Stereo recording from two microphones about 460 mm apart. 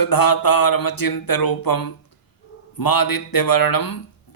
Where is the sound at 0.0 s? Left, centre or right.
Left.